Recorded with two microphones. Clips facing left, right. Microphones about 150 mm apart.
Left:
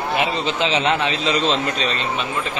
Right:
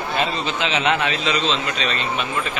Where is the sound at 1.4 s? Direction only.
45° left (ahead or behind).